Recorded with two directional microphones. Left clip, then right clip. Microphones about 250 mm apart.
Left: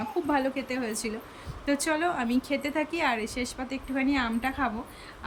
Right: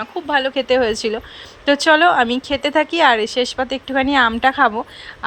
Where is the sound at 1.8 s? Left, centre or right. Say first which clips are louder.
Right 17 dB; right.